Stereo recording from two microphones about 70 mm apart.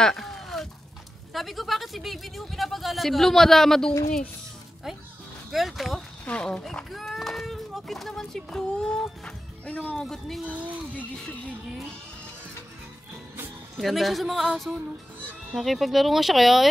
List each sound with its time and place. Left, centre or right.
0.0 s a sound: centre
1.3 s speech: centre
5.5 s speech: centre
6.2 s speech: centre
9.2 s speech: left
9.9 s speech: centre
10.4 s speech: right
11.1 s music: centre
13.7 s speech: centre